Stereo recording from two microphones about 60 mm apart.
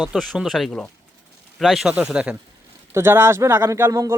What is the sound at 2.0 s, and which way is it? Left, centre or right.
Speech, centre.